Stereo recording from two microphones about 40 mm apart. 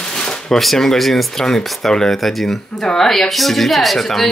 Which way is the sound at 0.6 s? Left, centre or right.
Centre.